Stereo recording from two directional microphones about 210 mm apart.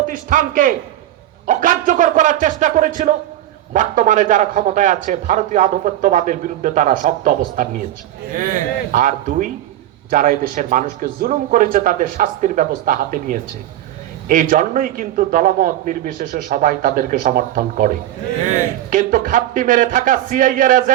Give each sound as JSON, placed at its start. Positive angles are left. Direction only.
{"t": 0.0, "sound": "a man's voice", "side_deg": -40}
{"t": 8.9, "sound": "a man's voice", "side_deg": -40}